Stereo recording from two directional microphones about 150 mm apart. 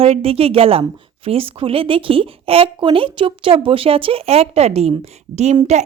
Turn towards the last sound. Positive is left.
turn(degrees=-45)  # may be behind; listen again after turning